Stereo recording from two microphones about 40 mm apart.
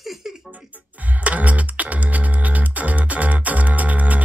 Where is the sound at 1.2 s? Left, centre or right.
Right.